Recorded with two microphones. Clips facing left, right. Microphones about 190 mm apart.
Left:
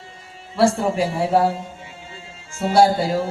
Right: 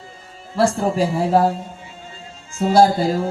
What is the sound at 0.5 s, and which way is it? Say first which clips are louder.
Speech: even; 35° right (ahead or behind).